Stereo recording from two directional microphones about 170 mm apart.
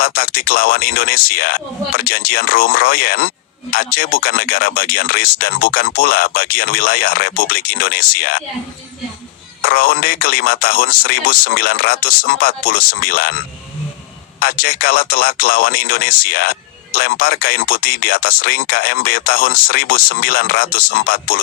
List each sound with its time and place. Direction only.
0.0 s speech: 60° left (ahead or behind)
9.6 s speech: 60° left (ahead or behind)
14.3 s speech: 60° left (ahead or behind)